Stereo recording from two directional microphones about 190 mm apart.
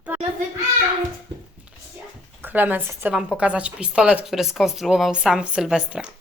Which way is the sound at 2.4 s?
10° right (ahead or behind).